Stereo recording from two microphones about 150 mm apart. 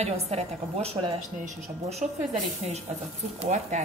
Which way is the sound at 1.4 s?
55° right (ahead or behind).